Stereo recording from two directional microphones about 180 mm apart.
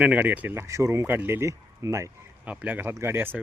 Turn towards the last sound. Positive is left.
turn(degrees=-10)  # may be behind; listen again after turning